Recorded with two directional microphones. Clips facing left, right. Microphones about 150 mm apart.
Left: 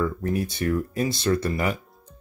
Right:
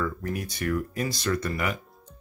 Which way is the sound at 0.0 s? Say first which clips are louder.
Left 5 dB; 30° left (ahead or behind).